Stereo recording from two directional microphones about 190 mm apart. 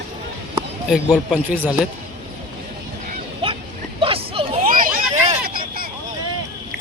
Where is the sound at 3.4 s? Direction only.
30° right (ahead or behind).